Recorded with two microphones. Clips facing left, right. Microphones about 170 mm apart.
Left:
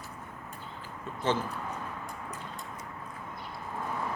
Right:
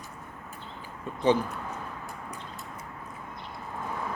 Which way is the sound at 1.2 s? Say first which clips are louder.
Right 6 dB; 15° right (ahead or behind).